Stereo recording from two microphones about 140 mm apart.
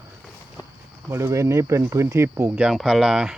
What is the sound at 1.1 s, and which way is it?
Speech, 20° right (ahead or behind).